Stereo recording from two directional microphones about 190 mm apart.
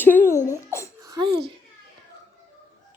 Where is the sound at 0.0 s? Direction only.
10° left (ahead or behind).